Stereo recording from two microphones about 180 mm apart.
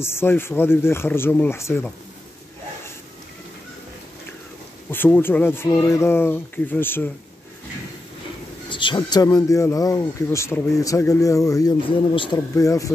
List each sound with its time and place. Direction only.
0.0 s speech: 15° left (ahead or behind)
4.9 s speech: 10° left (ahead or behind)
8.6 s speech: 25° left (ahead or behind)